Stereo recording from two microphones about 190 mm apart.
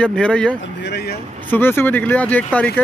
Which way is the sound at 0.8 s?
60° left (ahead or behind).